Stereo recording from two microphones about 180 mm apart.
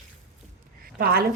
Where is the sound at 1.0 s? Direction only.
60° right (ahead or behind).